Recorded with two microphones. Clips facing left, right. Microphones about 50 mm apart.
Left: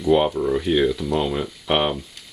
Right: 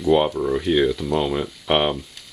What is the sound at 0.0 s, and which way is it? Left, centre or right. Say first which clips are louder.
Speech: even; centre.